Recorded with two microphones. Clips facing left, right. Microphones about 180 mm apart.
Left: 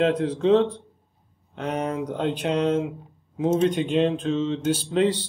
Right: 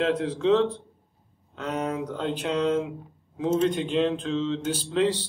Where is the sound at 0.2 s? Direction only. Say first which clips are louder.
Left 3 dB; 20° left (ahead or behind).